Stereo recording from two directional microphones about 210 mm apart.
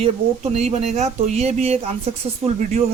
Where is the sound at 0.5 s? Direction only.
30° right (ahead or behind).